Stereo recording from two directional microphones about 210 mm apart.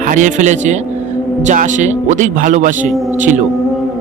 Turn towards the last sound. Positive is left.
turn(degrees=-35)  # may be behind; listen again after turning